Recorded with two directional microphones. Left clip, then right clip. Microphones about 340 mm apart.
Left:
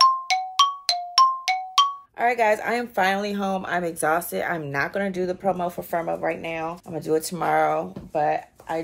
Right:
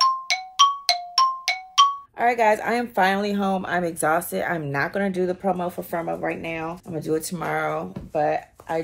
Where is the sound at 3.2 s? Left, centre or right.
Centre.